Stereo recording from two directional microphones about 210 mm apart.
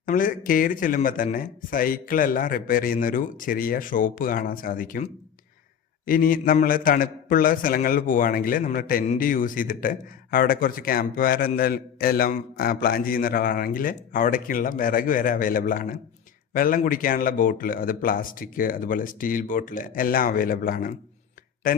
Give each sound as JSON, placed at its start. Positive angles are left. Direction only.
{"t": 0.0, "sound": "a man's voice", "side_deg": 40}